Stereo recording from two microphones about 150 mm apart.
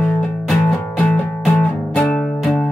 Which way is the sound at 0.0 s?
10° left (ahead or behind).